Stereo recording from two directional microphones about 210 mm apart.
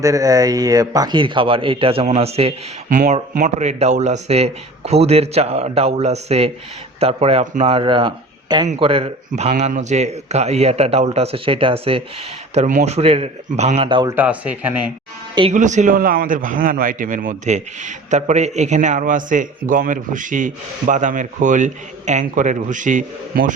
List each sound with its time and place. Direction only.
0.0 s a man's voice: 15° right (ahead or behind)
14.2 s speech: 5° right (ahead or behind)
15.4 s a man's voice: 30° right (ahead or behind)